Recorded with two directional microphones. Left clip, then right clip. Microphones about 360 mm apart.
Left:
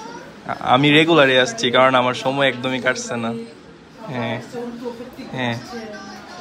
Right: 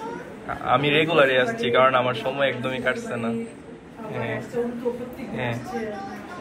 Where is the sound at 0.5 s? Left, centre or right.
Centre.